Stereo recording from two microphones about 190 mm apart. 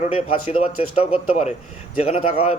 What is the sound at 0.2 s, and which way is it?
Speech, 30° left (ahead or behind).